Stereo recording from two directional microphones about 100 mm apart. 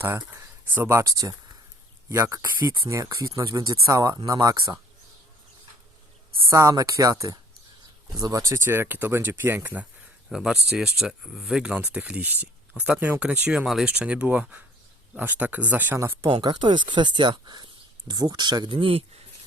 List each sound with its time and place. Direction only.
0.0 s speech: 25° right (ahead or behind)
1.0 s speech: 35° right (ahead or behind)
6.5 s speech: 30° right (ahead or behind)
10.2 s speech: 5° right (ahead or behind)
16.0 s speech: 30° right (ahead or behind)
16.4 s speech: 50° right (ahead or behind)
18.8 s speech: 75° right (ahead or behind)